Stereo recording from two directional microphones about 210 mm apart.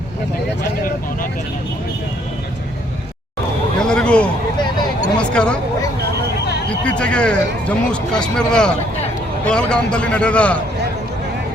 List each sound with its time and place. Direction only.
3.8 s a sound: 5° left (ahead or behind)
5.1 s speech: 5° left (ahead or behind)
6.8 s speech: 5° left (ahead or behind)